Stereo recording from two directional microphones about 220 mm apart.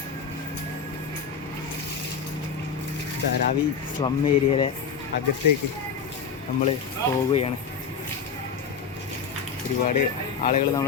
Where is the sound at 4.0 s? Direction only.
25° left (ahead or behind).